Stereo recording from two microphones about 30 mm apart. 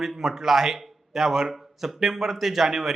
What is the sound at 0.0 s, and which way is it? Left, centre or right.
A man's voice, centre.